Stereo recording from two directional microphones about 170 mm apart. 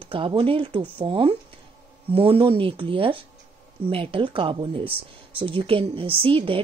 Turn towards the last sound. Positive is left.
turn(degrees=-30)  # may be behind; listen again after turning